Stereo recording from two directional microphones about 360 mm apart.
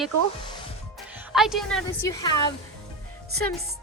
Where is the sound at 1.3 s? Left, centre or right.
Centre.